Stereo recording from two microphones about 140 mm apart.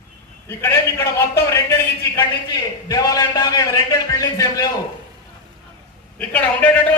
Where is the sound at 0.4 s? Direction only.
20° left (ahead or behind).